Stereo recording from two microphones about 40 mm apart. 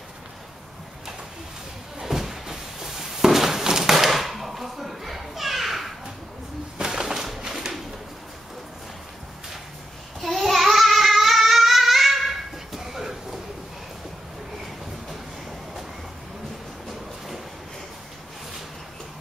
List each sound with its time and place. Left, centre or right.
2.0 s a sound: centre
6.8 s bird: centre
10.2 s child singing: centre